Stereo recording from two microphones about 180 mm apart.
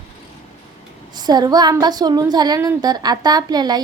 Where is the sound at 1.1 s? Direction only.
25° right (ahead or behind).